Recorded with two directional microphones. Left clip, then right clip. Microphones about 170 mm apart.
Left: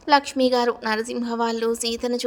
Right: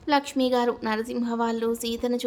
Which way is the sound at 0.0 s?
30° left (ahead or behind).